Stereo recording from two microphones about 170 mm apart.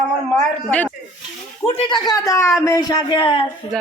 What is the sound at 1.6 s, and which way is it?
A man's voice, 30° left (ahead or behind).